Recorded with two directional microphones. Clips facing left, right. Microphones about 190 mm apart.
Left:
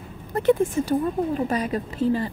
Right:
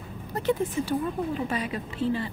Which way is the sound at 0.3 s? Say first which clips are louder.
Left 7 dB; 55° left (ahead or behind).